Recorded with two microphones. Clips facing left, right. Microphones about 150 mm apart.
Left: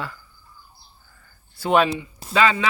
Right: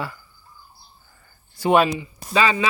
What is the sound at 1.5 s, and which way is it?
Speech, 10° right (ahead or behind).